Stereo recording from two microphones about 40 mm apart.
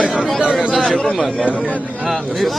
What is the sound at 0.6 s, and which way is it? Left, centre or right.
Speech, centre.